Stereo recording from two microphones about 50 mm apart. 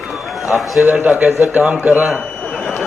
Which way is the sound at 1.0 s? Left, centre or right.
Right.